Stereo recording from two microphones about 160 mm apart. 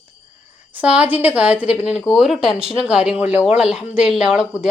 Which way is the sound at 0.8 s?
10° right (ahead or behind).